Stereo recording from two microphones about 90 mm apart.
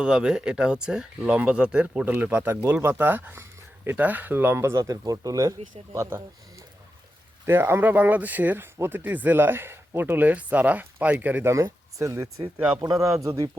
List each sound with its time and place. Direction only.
0.0 s speech: 10° right (ahead or behind); by 4.8 s 25° right (ahead or behind)
4.8 s speech: 40° right (ahead or behind)
7.4 s speech: 25° right (ahead or behind)
11.5 s speech: 35° right (ahead or behind)